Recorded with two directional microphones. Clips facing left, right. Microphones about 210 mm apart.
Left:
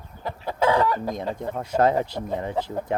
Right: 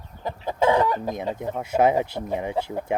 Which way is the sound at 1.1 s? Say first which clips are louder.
Right 1 dB; 10° right (ahead or behind).